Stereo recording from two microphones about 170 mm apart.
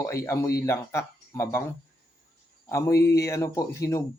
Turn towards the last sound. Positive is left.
turn(degrees=20)  # may be behind; listen again after turning